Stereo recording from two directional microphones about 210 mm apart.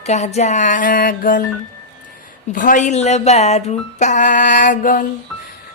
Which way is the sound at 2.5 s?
40° left (ahead or behind).